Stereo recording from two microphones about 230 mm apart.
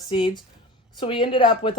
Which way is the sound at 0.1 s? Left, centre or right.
Centre.